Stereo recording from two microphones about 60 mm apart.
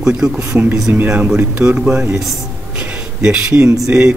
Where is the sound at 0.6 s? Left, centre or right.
Right.